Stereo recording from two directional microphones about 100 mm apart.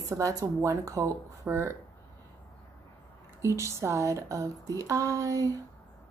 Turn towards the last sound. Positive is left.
turn(degrees=-35)  # may be behind; listen again after turning